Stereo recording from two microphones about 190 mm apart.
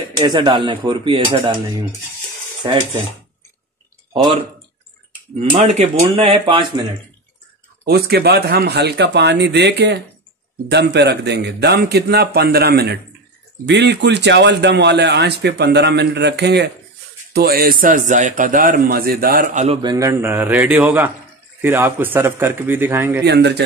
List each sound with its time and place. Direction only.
0.2 s speech: 20° right (ahead or behind)
4.1 s speech: 30° right (ahead or behind)
5.4 s speech: 35° right (ahead or behind)
7.8 s a man's voice: 55° right (ahead or behind)
19.6 s a man's voice: 30° right (ahead or behind)
19.9 s a man's voice: 15° right (ahead or behind)
23.2 s a man's voice: 60° right (ahead or behind)